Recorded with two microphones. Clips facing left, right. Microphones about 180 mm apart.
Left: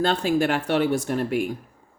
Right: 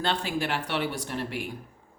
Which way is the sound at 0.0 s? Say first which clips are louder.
Left 8 dB; 45° left (ahead or behind).